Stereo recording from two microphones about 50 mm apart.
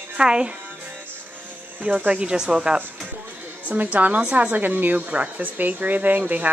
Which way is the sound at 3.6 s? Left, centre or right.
Right.